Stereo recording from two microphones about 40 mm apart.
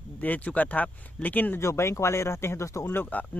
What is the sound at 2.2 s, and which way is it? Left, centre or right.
Speech, left.